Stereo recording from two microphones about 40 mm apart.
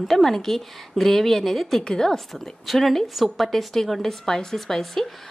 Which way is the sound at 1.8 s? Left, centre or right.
Centre.